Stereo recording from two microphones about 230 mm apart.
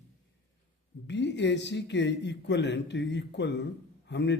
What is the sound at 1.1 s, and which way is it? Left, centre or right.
Speech, left.